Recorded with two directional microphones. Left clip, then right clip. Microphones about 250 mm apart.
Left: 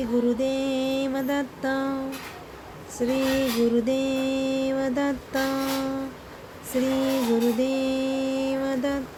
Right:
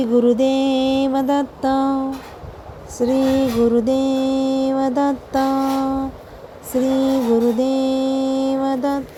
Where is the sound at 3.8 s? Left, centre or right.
Centre.